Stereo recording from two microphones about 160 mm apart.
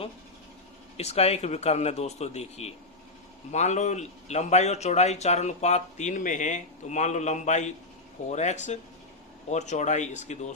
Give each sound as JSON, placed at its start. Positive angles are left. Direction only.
{"t": 0.9, "sound": "a man's voice", "side_deg": 40}